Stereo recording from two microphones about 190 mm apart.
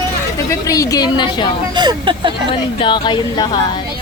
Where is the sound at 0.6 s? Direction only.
20° left (ahead or behind).